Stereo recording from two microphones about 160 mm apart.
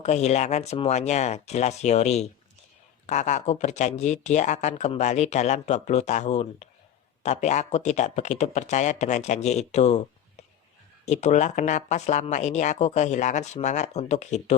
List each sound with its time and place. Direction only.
0.0 s speech: 45° left (ahead or behind)